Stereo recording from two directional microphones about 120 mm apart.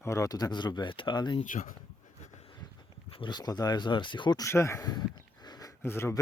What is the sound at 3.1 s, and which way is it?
Speech, 40° left (ahead or behind).